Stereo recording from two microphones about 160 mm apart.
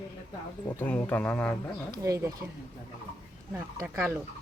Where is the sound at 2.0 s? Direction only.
20° right (ahead or behind).